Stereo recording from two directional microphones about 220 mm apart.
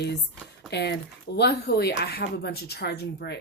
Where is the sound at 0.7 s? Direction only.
50° left (ahead or behind).